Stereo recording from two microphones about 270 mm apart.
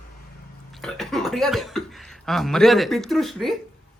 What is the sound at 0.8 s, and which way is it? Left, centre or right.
A woman's voice, centre.